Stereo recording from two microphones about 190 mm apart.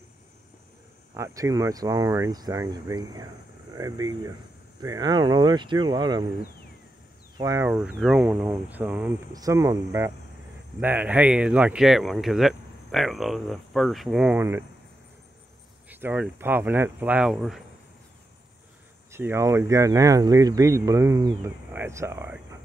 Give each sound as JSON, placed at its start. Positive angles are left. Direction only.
{"t": 1.1, "sound": "speech", "side_deg": -15}
{"t": 7.3, "sound": "speech", "side_deg": -15}
{"t": 8.0, "sound": "speech", "side_deg": -5}
{"t": 15.9, "sound": "speech", "side_deg": -10}
{"t": 19.1, "sound": "speech", "side_deg": -15}